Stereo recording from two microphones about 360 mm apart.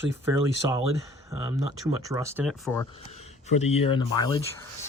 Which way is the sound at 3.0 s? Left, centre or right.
Centre.